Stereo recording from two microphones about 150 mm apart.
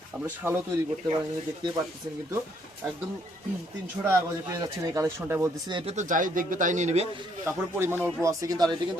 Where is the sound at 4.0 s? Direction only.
20° right (ahead or behind).